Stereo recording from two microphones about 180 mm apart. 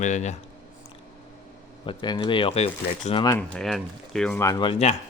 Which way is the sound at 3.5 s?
Centre (ahead or behind).